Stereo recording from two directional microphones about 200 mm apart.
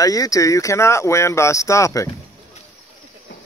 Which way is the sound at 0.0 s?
15° left (ahead or behind).